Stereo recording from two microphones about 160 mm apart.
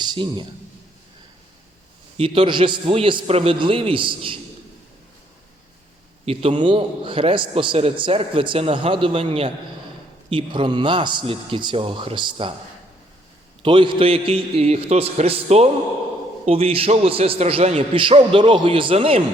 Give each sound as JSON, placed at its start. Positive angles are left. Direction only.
{"t": 0.0, "sound": "a man's voice", "side_deg": -30}
{"t": 2.1, "sound": "a man's voice", "side_deg": -35}
{"t": 6.2, "sound": "a man's voice", "side_deg": -35}
{"t": 13.6, "sound": "a man's voice", "side_deg": -30}